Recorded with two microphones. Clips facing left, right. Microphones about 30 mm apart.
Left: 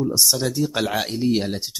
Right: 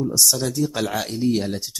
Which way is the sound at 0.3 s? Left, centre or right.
Centre.